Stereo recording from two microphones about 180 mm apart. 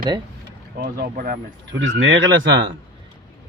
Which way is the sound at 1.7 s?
90° right.